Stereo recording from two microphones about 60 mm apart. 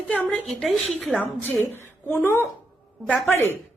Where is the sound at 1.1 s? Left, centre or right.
Left.